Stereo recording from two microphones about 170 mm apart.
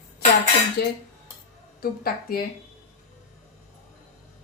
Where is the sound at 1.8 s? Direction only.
60° left (ahead or behind).